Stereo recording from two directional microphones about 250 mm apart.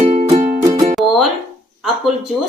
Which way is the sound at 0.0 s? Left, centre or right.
Right.